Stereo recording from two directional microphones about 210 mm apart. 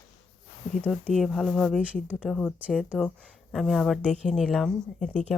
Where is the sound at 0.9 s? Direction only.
5° left (ahead or behind).